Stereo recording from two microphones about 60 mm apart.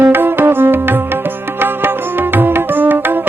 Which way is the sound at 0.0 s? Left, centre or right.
Right.